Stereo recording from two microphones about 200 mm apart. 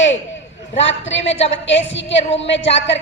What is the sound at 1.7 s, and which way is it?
A woman's voice, 65° left (ahead or behind).